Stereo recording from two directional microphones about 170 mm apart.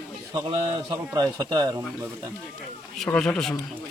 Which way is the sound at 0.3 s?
30° right (ahead or behind).